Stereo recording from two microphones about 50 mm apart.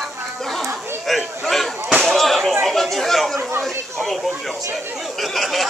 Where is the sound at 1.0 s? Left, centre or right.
Centre.